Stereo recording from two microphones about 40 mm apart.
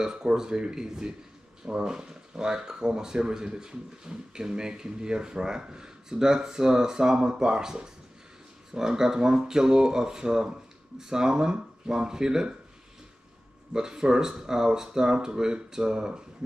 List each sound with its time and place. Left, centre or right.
0.0 s speech: centre
13.7 s speech: centre